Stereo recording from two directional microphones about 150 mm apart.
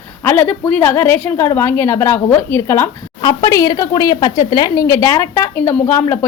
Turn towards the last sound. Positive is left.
turn(degrees=15)  # may be behind; listen again after turning